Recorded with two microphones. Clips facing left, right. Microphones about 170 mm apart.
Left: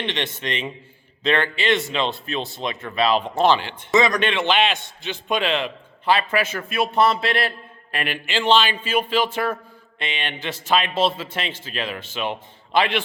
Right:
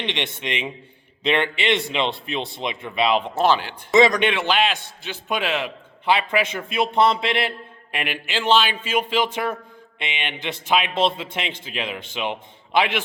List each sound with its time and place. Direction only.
0.0 s a man's voice: 15° right (ahead or behind)
3.3 s a man's voice: 5° right (ahead or behind)
3.9 s speech: 25° right (ahead or behind)
4.3 s a man's voice: centre (ahead or behind)